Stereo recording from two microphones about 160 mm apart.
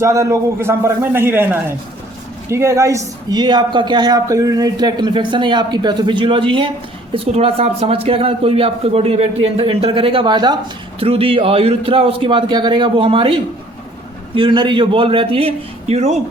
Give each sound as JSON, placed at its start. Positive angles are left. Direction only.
{"t": 0.0, "sound": "a man's voice", "side_deg": -20}